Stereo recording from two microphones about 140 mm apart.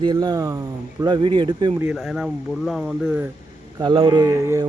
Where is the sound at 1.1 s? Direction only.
35° right (ahead or behind).